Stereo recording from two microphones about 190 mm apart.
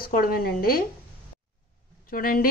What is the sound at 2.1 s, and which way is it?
Speech, 50° left (ahead or behind).